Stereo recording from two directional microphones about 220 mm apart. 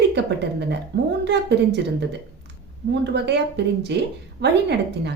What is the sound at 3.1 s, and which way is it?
A woman's voice, 50° right (ahead or behind).